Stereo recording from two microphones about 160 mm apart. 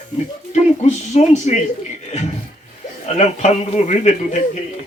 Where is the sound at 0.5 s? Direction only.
45° left (ahead or behind).